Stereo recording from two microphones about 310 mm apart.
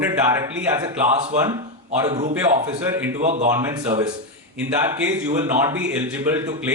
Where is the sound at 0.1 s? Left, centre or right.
Centre.